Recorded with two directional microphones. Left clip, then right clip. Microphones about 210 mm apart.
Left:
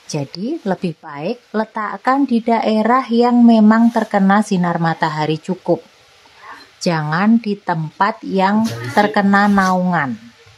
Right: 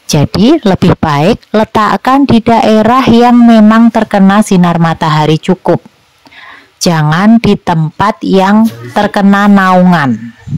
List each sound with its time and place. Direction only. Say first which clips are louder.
0.1 s speech: right 16 dB; 45° right (ahead or behind)
6.8 s speech: right 8 dB; 45° right (ahead or behind)